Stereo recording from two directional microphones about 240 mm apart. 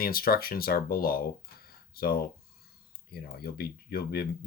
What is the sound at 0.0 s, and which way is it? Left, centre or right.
Speech, left.